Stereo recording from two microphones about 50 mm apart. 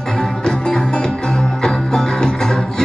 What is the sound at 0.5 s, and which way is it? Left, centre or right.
Music, centre.